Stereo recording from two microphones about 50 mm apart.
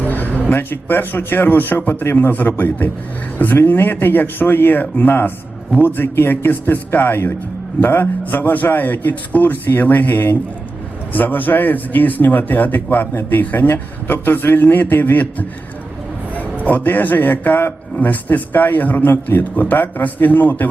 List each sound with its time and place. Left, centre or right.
0.0 s a sound: left
0.5 s speech: left
16.6 s speech: left